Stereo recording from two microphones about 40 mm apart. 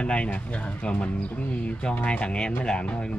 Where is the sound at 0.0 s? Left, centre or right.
Left.